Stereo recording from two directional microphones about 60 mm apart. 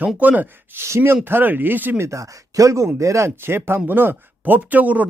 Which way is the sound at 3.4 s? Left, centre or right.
Right.